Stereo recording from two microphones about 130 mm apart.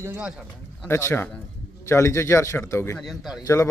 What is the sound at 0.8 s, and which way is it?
Speech, 20° left (ahead or behind).